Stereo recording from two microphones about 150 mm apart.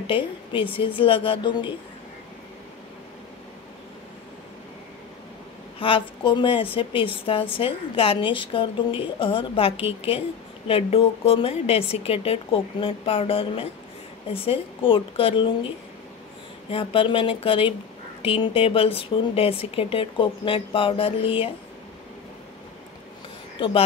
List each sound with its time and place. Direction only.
0.0 s speech: 35° left (ahead or behind)
5.8 s speech: 35° left (ahead or behind)
16.7 s speech: 35° left (ahead or behind)